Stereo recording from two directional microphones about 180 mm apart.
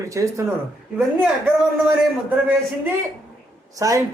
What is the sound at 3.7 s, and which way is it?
Speech, 20° right (ahead or behind).